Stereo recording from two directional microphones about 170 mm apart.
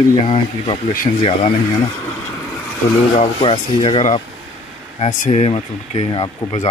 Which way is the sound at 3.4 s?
35° left (ahead or behind).